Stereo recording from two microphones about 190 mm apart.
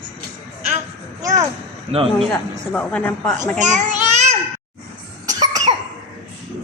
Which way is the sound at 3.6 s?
40° right (ahead or behind).